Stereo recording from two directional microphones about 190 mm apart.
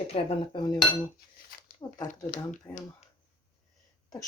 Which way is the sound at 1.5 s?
50° left (ahead or behind).